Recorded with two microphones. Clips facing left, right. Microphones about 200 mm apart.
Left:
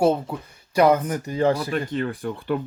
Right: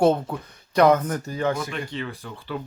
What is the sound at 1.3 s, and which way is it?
Speech, 35° left (ahead or behind).